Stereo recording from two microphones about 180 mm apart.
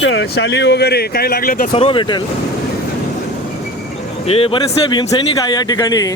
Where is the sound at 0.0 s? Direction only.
80° left; by 1.7 s 55° left (ahead or behind).